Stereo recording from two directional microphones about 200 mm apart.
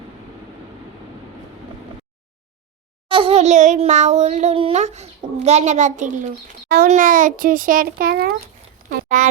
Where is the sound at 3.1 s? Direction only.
25° right (ahead or behind).